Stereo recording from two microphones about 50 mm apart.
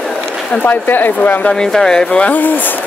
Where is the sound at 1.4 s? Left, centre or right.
Centre.